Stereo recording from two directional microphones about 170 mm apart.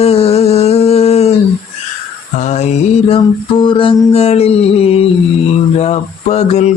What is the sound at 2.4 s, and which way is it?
Music, 40° left (ahead or behind).